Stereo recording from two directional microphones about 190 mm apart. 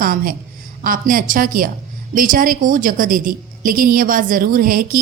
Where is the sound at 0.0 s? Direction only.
50° right (ahead or behind).